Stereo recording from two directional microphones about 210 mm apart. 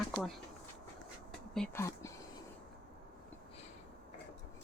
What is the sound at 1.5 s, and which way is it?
Speech, 10° left (ahead or behind).